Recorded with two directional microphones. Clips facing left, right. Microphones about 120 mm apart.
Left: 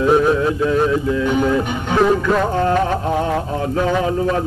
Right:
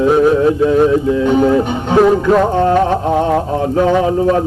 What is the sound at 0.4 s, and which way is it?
Music, 25° right (ahead or behind).